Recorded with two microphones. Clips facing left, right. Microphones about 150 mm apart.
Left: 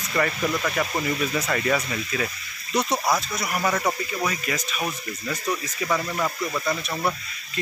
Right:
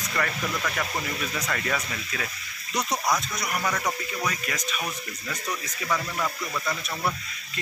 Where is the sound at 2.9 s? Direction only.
25° left (ahead or behind).